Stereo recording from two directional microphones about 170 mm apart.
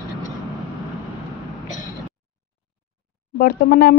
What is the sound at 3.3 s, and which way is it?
Speech, 65° left (ahead or behind).